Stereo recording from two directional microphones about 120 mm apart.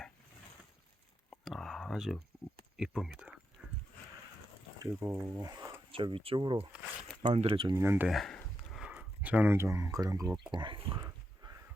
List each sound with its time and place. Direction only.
1.5 s a sound: centre (ahead or behind)
2.7 s speech: 5° right (ahead or behind)
3.6 s horse: 10° right (ahead or behind)
4.8 s speech: 20° right (ahead or behind)
5.4 s speech: 30° right (ahead or behind)
5.9 s speech: 45° right (ahead or behind)
7.7 s speech: 20° right (ahead or behind)
8.0 s speech: centre (ahead or behind); by 10.3 s 30° right (ahead or behind)
10.5 s speech: 40° right (ahead or behind)
10.9 s dog: 30° right (ahead or behind)